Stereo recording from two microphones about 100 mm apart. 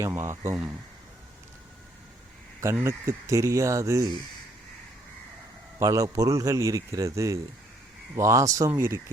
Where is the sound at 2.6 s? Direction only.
25° right (ahead or behind).